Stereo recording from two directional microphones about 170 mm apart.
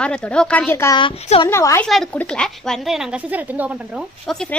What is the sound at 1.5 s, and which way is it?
Speech, 15° left (ahead or behind).